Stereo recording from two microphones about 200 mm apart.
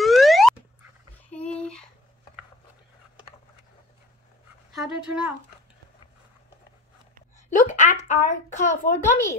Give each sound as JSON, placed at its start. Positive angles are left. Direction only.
{"t": 0.0, "sound": "boing", "side_deg": 0}
{"t": 1.5, "sound": "a sound", "side_deg": 5}
{"t": 4.7, "sound": "speech", "side_deg": -5}
{"t": 7.4, "sound": "a woman's voice", "side_deg": 35}